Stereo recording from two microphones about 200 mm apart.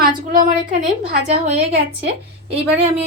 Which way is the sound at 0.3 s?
40° right (ahead or behind).